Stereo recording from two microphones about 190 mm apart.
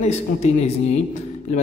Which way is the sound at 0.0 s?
35° left (ahead or behind).